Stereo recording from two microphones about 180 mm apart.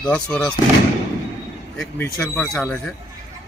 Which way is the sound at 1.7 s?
5° left (ahead or behind).